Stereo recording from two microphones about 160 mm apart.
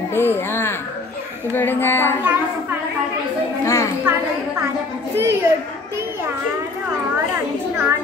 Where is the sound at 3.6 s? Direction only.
20° left (ahead or behind).